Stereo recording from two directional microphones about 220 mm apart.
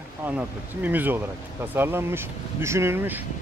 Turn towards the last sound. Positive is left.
turn(degrees=-10)  # may be behind; listen again after turning